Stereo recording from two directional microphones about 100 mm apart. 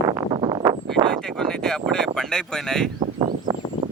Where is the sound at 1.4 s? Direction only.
5° left (ahead or behind).